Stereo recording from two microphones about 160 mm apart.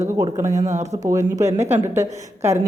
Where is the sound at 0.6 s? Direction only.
45° right (ahead or behind).